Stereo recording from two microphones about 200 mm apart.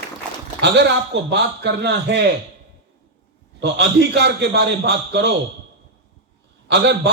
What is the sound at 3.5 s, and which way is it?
A man's voice, 60° right (ahead or behind).